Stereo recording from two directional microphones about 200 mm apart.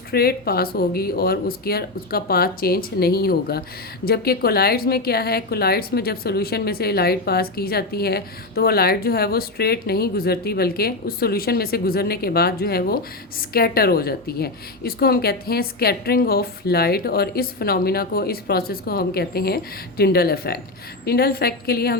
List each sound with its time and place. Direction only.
0.1 s a woman's voice: 50° left (ahead or behind)